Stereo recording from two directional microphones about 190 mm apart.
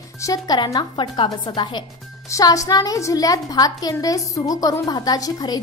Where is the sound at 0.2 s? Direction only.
20° left (ahead or behind).